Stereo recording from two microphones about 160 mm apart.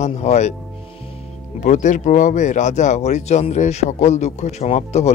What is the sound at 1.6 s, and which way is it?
Speech, 50° left (ahead or behind).